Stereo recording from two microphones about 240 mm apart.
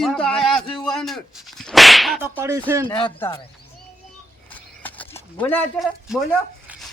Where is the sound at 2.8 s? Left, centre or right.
Centre.